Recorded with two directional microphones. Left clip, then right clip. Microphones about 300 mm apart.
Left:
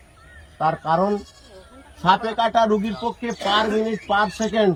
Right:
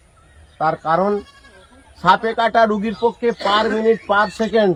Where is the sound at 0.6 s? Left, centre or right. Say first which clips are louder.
Right 3 dB; centre.